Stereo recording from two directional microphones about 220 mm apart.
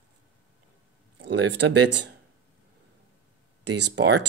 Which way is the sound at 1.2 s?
55° right (ahead or behind).